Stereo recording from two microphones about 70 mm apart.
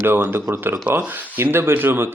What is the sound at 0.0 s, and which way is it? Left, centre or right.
Speech, right.